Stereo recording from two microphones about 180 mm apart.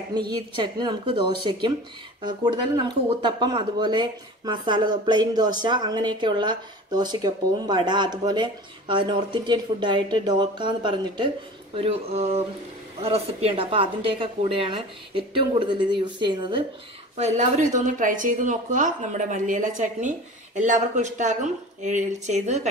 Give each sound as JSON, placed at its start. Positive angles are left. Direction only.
{"t": 0.3, "sound": "speech", "side_deg": -25}
{"t": 17.2, "sound": "a woman's voice", "side_deg": -40}